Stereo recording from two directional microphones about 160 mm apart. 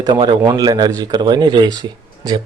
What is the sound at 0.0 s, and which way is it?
Speech, 25° right (ahead or behind).